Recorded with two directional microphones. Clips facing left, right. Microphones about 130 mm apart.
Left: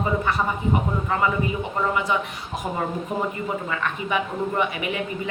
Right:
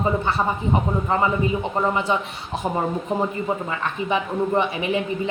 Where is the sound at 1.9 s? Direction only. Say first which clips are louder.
Right 2 dB; 30° right (ahead or behind).